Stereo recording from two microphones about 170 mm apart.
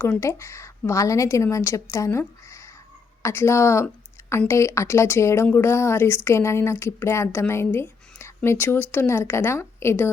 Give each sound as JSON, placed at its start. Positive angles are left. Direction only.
{"t": 0.0, "sound": "speech", "side_deg": 15}